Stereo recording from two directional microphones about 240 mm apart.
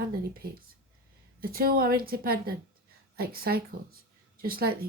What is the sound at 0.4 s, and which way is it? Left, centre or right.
Speech, right.